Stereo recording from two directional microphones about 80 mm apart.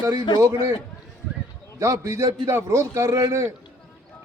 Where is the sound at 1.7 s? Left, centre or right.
Right.